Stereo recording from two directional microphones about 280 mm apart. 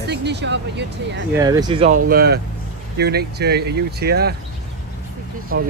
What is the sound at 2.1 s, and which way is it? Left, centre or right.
Speech, right.